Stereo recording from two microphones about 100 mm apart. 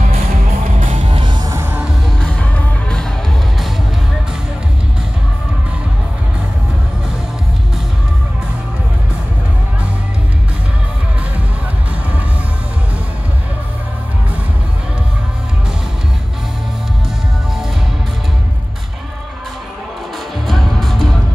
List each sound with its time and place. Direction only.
1.1 s music: 55° right (ahead or behind)
1.4 s music: 30° right (ahead or behind)
2.5 s music: 5° left (ahead or behind)
20.4 s music: centre (ahead or behind)